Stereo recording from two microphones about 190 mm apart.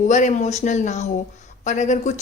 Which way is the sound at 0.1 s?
40° left (ahead or behind).